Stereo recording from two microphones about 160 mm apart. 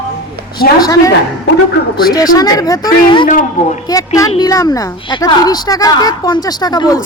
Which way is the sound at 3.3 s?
55° left (ahead or behind).